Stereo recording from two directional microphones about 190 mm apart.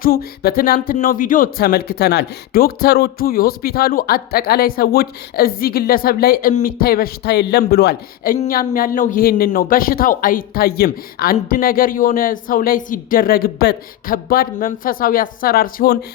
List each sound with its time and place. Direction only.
0.0 s speech: 50° left (ahead or behind)